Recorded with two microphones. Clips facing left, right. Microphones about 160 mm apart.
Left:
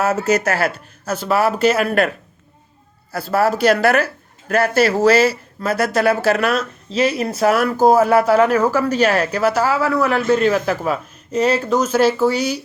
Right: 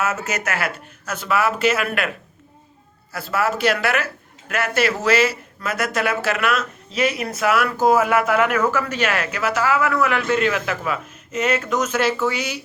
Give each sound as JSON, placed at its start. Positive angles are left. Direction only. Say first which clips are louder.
{"t": 0.0, "sound": "speech", "louder": "left 7 dB", "side_deg": 35}
{"t": 3.1, "sound": "speech", "louder": "left 5 dB", "side_deg": 35}